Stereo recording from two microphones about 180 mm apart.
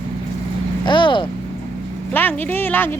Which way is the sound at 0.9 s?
25° left (ahead or behind).